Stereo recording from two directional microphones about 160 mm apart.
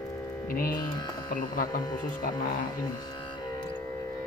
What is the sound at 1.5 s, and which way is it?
Speech, 55° left (ahead or behind).